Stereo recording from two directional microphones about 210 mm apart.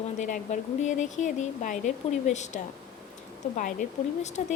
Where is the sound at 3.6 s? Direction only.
40° left (ahead or behind).